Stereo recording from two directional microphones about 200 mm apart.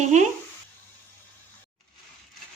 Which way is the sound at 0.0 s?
35° right (ahead or behind).